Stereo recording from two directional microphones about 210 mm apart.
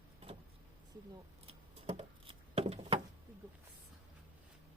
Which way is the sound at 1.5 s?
30° right (ahead or behind).